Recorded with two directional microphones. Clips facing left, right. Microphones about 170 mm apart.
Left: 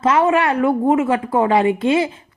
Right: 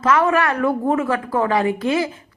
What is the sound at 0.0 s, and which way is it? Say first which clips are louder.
A woman's voice: left 2 dB; 25° left (ahead or behind).